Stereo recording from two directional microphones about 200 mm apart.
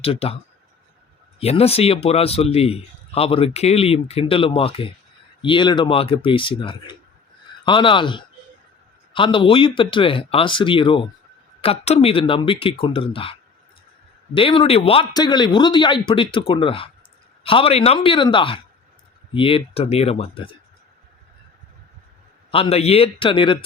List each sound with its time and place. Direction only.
0.0 s a man's voice: 30° left (ahead or behind)
1.4 s a man's voice: 30° left (ahead or behind)
14.3 s a man's voice: 25° left (ahead or behind)
22.5 s a man's voice: 30° left (ahead or behind)